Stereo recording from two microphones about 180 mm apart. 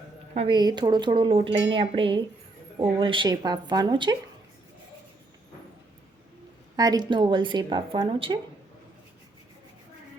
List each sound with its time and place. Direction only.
0.3 s a woman's voice: 25° right (ahead or behind)
6.7 s a woman's voice: 20° right (ahead or behind)